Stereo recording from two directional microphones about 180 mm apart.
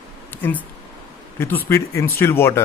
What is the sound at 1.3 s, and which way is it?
Speech, 15° left (ahead or behind).